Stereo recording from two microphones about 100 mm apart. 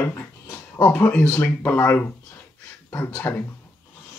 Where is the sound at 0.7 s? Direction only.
20° left (ahead or behind).